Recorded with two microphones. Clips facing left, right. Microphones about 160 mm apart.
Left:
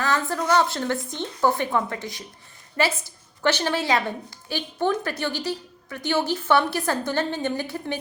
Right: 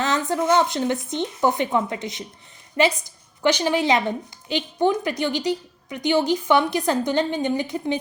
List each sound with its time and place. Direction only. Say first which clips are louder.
0.0 s a woman's voice: right 2 dB; 20° right (ahead or behind)